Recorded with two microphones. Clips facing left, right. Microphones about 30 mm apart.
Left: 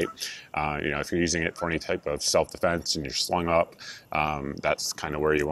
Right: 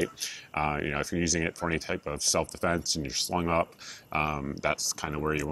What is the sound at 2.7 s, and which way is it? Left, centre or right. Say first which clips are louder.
Speech: left 2 dB; left.